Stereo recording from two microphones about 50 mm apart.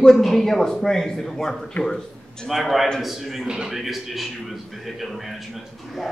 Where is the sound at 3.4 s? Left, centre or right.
Centre.